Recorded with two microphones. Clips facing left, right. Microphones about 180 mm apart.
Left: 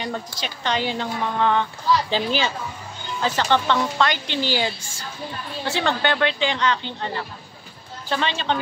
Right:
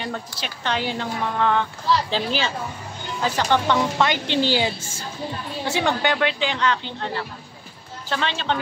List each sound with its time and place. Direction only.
0.0 s a woman's voice: 5° right (ahead or behind)